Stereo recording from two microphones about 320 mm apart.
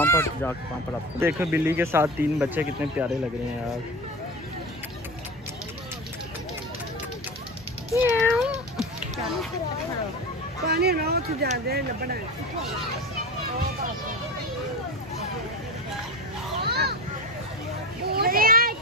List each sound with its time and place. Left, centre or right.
0.0 s speech: centre
1.2 s speech: centre
7.9 s cat: centre
10.6 s speech: right
16.6 s children playing: right
18.1 s children playing: right